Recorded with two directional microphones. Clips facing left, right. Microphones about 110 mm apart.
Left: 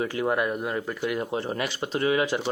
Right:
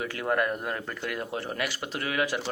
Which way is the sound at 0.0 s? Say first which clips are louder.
Left 2 dB; 20° left (ahead or behind).